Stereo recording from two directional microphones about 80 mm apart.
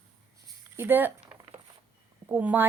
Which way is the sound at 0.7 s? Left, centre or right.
Right.